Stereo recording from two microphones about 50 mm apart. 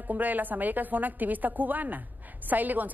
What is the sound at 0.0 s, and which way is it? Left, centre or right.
A woman's voice, right.